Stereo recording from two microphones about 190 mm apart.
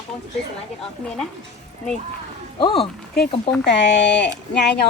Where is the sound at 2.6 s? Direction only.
30° left (ahead or behind).